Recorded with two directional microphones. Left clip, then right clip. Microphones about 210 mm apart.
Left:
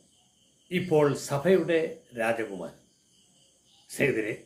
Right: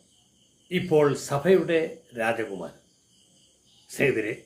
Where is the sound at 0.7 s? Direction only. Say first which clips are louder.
Right 2 dB; 10° right (ahead or behind).